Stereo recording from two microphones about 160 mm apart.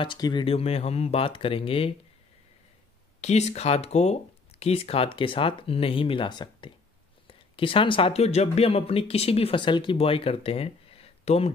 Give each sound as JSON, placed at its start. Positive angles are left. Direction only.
{"t": 0.0, "sound": "speech", "side_deg": 30}
{"t": 3.2, "sound": "speech", "side_deg": 45}